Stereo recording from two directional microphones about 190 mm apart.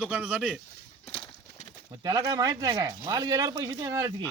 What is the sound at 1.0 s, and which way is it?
Horse, 30° left (ahead or behind).